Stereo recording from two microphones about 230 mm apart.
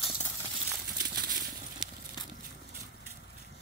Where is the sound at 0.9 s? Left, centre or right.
Right.